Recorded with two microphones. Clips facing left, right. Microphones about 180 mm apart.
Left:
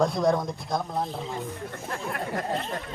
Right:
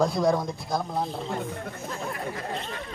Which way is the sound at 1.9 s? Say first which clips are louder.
Left 2 dB; 60° left (ahead or behind).